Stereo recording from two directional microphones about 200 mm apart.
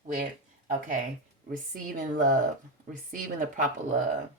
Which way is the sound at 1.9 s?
40° right (ahead or behind).